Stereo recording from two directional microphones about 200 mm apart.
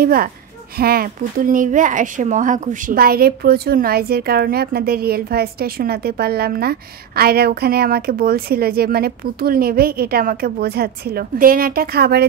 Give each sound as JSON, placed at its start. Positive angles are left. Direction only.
{"t": 0.0, "sound": "speech", "side_deg": -45}